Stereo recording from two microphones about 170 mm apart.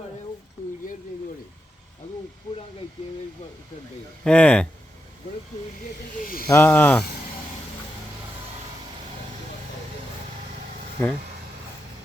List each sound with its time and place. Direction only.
4.2 s speech: 5° left (ahead or behind)
6.2 s snake: 60° left (ahead or behind)
6.5 s speech: 10° left (ahead or behind)
11.0 s speech: 15° left (ahead or behind)